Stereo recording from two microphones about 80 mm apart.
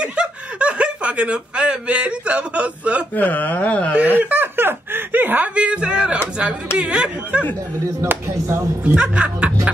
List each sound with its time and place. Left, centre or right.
0.0 s speech: centre
3.2 s speech: left
4.2 s a sound: right
6.8 s speech: centre
8.0 s speech: right
8.8 s speech: centre